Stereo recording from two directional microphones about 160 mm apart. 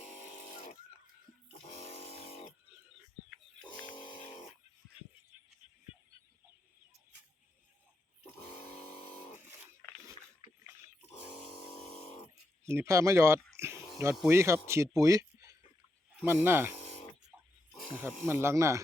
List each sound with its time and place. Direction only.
3.7 s a sound: 30° left (ahead or behind)
12.6 s speech: 15° right (ahead or behind)
18.0 s speech: 15° right (ahead or behind)